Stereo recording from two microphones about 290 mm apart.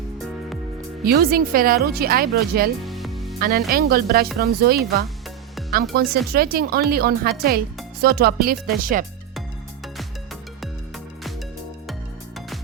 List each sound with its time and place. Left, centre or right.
1.0 s speech: right
2.8 s music: centre
3.4 s speech: right